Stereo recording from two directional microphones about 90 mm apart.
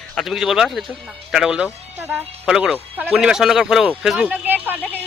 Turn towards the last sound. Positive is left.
turn(degrees=-20)  # may be behind; listen again after turning